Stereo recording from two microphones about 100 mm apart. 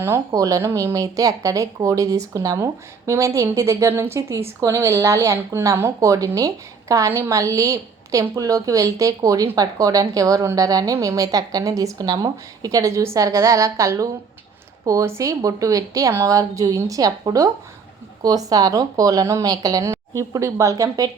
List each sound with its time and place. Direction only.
0.3 s a woman's voice: 35° right (ahead or behind)